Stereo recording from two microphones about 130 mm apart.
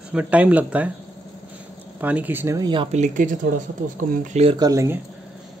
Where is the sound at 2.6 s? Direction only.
40° right (ahead or behind).